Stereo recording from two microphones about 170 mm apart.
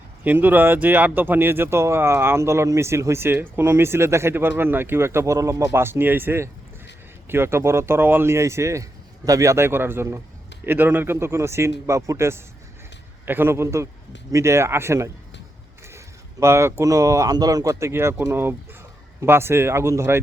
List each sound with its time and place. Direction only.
0.3 s speech: 10° right (ahead or behind)
16.4 s speech: 15° right (ahead or behind)